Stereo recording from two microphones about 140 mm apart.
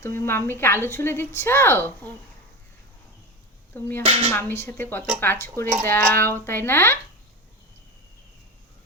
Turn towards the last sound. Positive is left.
turn(degrees=15)  # may be behind; listen again after turning